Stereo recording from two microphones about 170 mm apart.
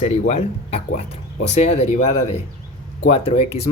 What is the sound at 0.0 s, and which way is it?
Speech, 35° left (ahead or behind).